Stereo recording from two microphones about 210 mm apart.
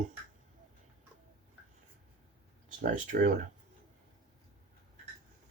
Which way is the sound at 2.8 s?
40° right (ahead or behind).